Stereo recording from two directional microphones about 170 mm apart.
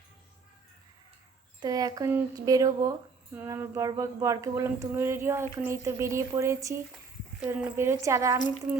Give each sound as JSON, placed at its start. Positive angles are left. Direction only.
{"t": 1.6, "sound": "speech", "side_deg": -20}